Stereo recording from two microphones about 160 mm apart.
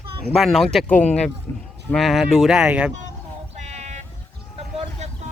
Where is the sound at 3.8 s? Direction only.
45° right (ahead or behind).